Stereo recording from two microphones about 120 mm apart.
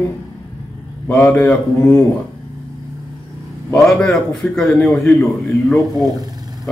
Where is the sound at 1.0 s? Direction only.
5° left (ahead or behind).